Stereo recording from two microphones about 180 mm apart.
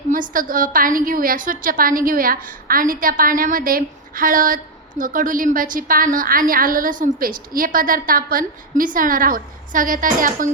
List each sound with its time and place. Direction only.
0.1 s a woman's voice: 50° right (ahead or behind)